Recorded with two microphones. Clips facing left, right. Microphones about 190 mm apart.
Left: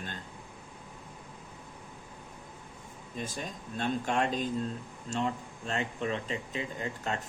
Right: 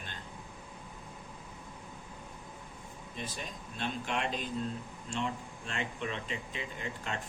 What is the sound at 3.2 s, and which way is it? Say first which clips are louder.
Speech: left 4 dB; 45° left (ahead or behind).